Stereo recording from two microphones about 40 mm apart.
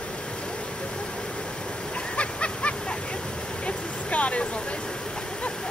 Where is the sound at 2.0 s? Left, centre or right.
Left.